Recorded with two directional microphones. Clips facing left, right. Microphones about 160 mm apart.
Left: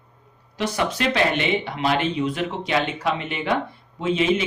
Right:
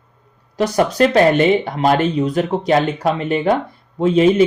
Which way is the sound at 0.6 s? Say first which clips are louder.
Right 9 dB; 40° right (ahead or behind).